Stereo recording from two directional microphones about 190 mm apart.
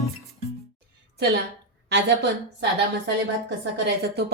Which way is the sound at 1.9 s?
65° right (ahead or behind).